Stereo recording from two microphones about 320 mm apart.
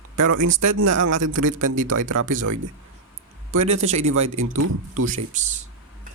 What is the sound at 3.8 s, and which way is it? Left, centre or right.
Speech, right.